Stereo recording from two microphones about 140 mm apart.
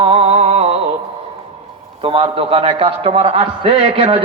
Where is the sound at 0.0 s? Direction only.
45° right (ahead or behind).